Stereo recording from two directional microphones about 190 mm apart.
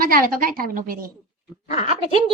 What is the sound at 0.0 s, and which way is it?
Speech, 50° right (ahead or behind).